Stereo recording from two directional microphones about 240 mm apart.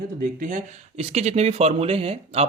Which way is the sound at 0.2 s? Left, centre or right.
Right.